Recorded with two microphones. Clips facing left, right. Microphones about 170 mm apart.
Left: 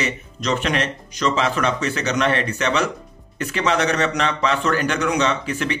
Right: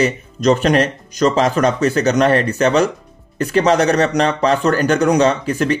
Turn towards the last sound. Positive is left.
turn(degrees=-40)  # may be behind; listen again after turning